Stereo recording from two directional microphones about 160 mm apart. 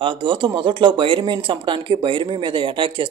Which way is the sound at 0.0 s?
30° right (ahead or behind).